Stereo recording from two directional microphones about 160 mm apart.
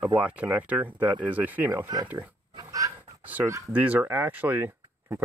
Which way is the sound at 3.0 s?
10° right (ahead or behind).